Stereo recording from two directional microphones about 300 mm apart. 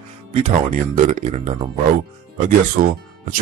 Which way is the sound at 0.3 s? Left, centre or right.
Right.